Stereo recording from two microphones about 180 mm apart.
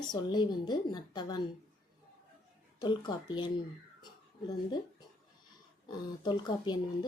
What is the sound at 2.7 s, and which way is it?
Speech, 25° left (ahead or behind).